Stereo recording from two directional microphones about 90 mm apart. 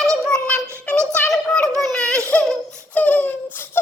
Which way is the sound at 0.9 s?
15° left (ahead or behind).